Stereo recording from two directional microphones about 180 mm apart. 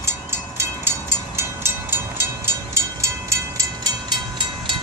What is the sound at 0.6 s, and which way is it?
Train, 15° right (ahead or behind).